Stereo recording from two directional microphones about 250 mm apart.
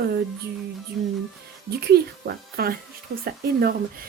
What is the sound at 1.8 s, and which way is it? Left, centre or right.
Speech, right.